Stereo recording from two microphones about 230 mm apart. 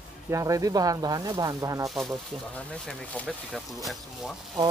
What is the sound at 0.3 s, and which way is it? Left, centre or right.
Speech, centre.